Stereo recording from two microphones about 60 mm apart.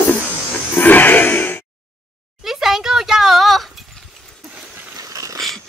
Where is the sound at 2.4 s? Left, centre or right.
Centre.